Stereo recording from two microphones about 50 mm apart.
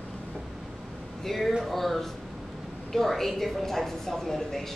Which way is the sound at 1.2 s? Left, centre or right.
Centre.